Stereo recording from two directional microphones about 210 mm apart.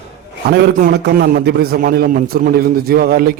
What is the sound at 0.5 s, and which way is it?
A man's voice, 50° right (ahead or behind).